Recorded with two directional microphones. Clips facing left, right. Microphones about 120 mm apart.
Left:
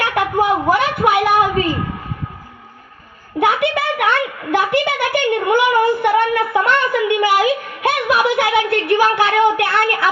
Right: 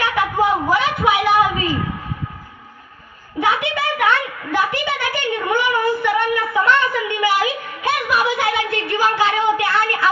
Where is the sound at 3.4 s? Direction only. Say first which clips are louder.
Left 3 dB; 60° left (ahead or behind).